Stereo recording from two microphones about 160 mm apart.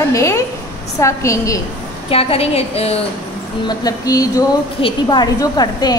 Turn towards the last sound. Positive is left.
turn(degrees=25)  # may be behind; listen again after turning